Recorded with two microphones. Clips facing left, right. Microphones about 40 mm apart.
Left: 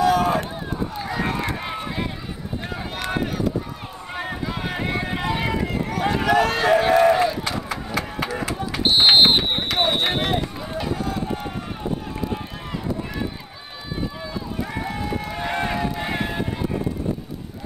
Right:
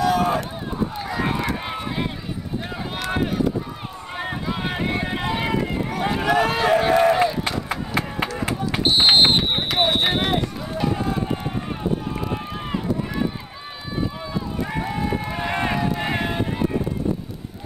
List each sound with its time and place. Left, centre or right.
0.0 s boat: centre
0.7 s run: centre
3.1 s run: centre
4.2 s a sound: centre
4.7 s run: centre
7.7 s run: right
8.8 s a sound: centre
11.0 s run: right
14.6 s run: centre
15.7 s a sound: centre